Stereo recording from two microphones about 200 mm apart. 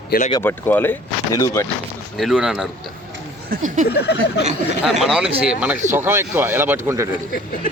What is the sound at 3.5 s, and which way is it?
Speech, 40° right (ahead or behind).